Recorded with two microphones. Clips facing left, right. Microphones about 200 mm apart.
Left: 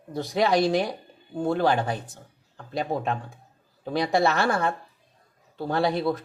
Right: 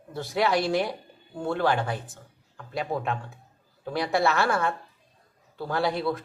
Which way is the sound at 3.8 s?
20° left (ahead or behind).